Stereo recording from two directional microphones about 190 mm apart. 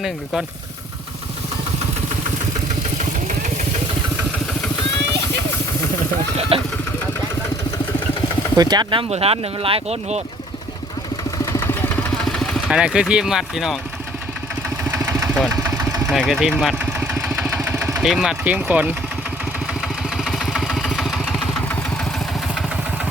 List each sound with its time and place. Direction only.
3.0 s vehicle: 40° right (ahead or behind)
6.5 s speech: 30° right (ahead or behind)
8.5 s speech: 20° right (ahead or behind)
11.5 s vehicle: 10° left (ahead or behind)
14.8 s engine: 15° right (ahead or behind)
15.8 s engine: 5° right (ahead or behind)
20.2 s vehicle: centre (ahead or behind)